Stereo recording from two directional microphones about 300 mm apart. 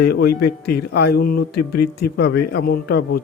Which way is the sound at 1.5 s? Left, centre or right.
Left.